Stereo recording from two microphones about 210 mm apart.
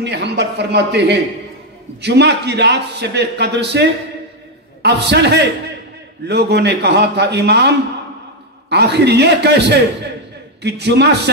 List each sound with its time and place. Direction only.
0.0 s a man's voice: 55° right (ahead or behind)
4.8 s a man's voice: 55° right (ahead or behind)